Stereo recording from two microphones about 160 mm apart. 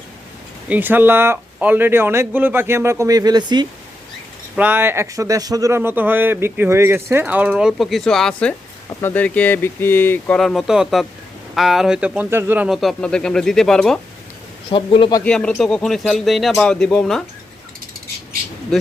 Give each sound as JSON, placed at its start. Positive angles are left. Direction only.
{"t": 0.7, "sound": "speech", "side_deg": -10}
{"t": 4.5, "sound": "speech", "side_deg": -10}
{"t": 14.7, "sound": "a man's voice", "side_deg": 30}
{"t": 15.2, "sound": "speech", "side_deg": 5}